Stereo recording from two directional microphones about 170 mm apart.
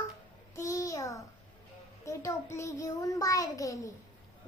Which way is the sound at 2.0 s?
15° left (ahead or behind).